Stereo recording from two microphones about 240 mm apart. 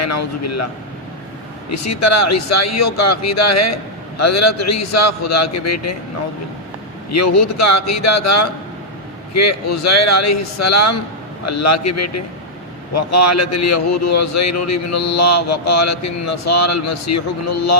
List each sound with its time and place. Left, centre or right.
0.0 s a man's voice: left
1.7 s a man's voice: left
7.1 s a man's voice: left